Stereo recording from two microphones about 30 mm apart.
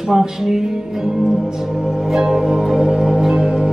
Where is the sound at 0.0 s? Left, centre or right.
Centre.